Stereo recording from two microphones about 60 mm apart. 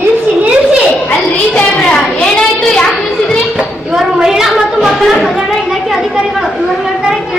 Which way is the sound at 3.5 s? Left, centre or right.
Centre.